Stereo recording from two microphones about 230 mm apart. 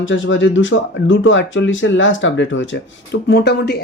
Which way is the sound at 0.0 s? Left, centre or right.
Left.